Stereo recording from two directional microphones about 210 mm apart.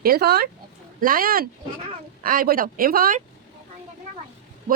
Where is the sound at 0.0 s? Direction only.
45° right (ahead or behind).